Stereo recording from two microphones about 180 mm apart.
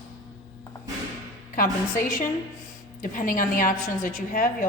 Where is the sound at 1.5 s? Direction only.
50° left (ahead or behind).